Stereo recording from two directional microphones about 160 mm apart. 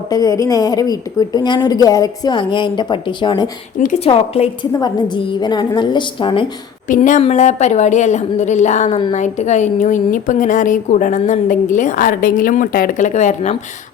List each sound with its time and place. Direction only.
0.1 s a woman's voice: 20° left (ahead or behind)
4.0 s a woman's voice: 40° left (ahead or behind)
4.7 s a woman's voice: 25° left (ahead or behind)
6.8 s speech: 55° left (ahead or behind)
7.2 s a woman's voice: 45° left (ahead or behind)